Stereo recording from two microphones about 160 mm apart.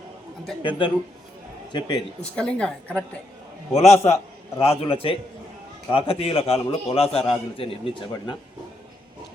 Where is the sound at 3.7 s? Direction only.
45° left (ahead or behind); by 8.4 s 25° left (ahead or behind).